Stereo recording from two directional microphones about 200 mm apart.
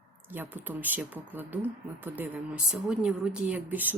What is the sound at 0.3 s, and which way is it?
Speech, 10° right (ahead or behind).